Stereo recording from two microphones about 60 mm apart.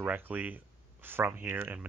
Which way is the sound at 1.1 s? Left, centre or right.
Right.